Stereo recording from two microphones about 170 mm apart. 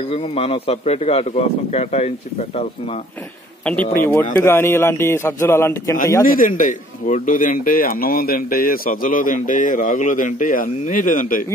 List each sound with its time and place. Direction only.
0.1 s a man's voice: 35° left (ahead or behind)
3.6 s a man's voice: 10° left (ahead or behind)
6.2 s a man's voice: 55° left (ahead or behind)